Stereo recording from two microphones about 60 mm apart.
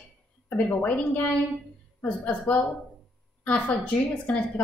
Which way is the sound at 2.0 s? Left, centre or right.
Left.